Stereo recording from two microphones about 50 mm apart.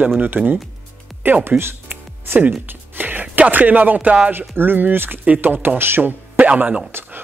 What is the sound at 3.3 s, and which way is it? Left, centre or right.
Speech, right.